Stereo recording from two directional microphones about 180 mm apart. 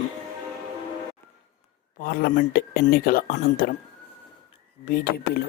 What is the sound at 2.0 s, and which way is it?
Speech, 55° left (ahead or behind).